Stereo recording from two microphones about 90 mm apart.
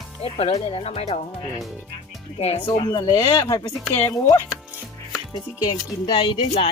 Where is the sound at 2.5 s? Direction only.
70° left (ahead or behind).